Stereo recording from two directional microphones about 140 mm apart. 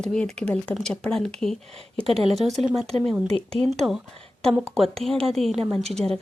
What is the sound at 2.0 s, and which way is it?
Speech, 45° right (ahead or behind).